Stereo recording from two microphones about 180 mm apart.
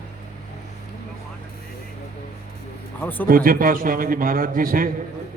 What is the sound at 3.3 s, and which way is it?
A man's voice, 50° right (ahead or behind).